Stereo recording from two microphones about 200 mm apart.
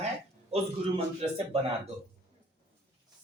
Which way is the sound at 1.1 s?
30° right (ahead or behind).